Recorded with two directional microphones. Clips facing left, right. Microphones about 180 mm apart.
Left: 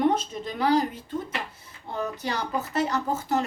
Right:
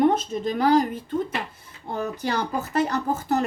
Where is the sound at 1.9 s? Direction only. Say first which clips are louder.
Right 3 dB; 50° right (ahead or behind).